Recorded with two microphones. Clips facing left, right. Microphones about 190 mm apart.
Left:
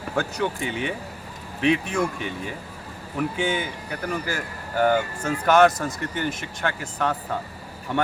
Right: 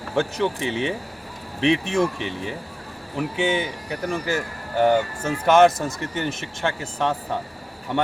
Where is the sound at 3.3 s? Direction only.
20° right (ahead or behind).